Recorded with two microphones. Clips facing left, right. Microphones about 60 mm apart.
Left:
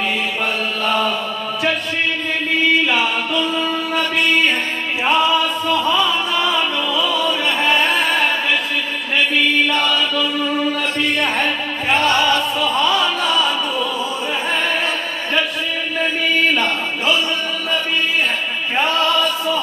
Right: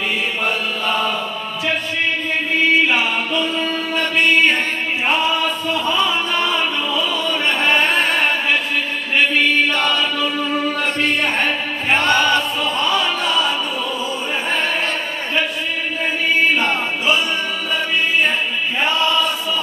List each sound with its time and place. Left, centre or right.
12.0 s chant: centre